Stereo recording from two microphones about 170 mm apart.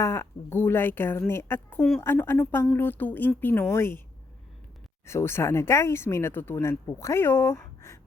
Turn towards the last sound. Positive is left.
turn(degrees=15)  # may be behind; listen again after turning